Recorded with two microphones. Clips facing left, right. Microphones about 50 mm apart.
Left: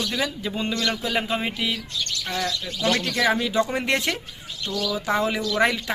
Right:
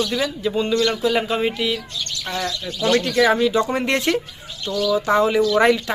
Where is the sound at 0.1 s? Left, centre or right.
Centre.